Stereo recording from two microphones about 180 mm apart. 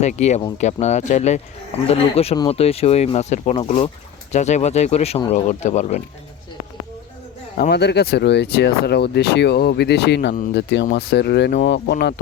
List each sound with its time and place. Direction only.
0.0 s speech: 40° left (ahead or behind)
7.5 s speech: 55° left (ahead or behind)